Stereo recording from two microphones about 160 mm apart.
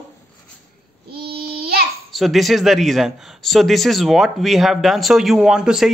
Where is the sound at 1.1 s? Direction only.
75° right (ahead or behind).